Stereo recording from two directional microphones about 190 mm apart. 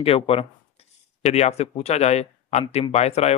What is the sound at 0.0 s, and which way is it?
Speech, 30° left (ahead or behind).